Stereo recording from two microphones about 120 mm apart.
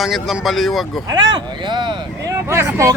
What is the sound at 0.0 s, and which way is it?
Speech, centre (ahead or behind).